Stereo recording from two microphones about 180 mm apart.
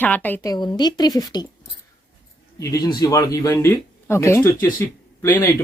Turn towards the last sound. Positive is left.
turn(degrees=10)  # may be behind; listen again after turning